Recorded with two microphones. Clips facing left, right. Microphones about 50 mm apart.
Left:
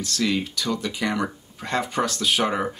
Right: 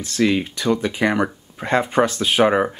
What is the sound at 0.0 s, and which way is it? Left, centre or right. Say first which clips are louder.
Speech: right 5 dB; right.